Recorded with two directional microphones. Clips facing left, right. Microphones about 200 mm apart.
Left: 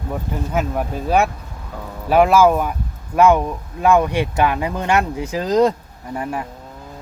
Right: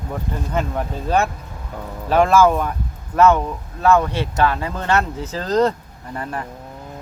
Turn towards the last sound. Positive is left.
turn(degrees=10)  # may be behind; listen again after turning